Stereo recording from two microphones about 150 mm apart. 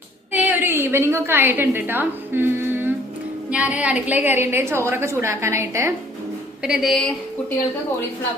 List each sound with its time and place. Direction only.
0.3 s a woman's voice: 10° right (ahead or behind)
6.6 s a woman's voice: 5° right (ahead or behind)